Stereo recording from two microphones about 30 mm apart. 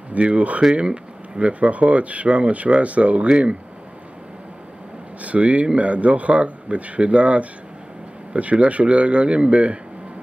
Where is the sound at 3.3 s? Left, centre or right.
Right.